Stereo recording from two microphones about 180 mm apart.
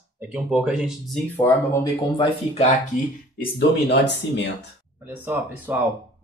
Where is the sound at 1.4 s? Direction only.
10° left (ahead or behind).